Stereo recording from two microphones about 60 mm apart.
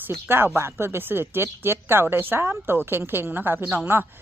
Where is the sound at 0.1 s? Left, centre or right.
Right.